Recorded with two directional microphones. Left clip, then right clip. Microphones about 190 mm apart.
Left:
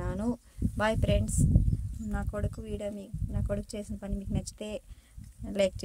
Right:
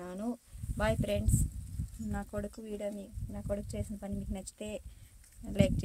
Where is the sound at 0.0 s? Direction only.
15° left (ahead or behind).